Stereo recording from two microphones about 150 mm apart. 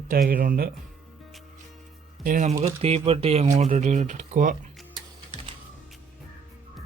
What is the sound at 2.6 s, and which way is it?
Speech, 45° right (ahead or behind).